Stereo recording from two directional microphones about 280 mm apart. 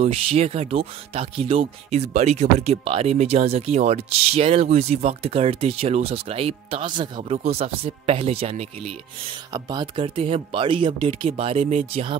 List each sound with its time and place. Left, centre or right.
0.0 s speech: right